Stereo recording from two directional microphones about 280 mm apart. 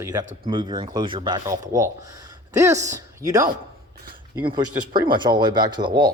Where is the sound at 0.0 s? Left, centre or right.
Centre.